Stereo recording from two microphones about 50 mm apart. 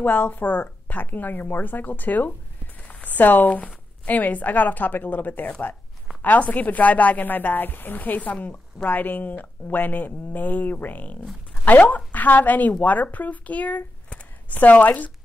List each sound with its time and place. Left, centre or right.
0.0 s a woman's voice: left